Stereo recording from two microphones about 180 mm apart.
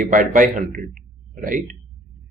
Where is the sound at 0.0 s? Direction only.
50° right (ahead or behind).